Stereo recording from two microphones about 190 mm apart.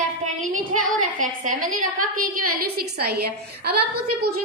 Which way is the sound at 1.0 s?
40° right (ahead or behind).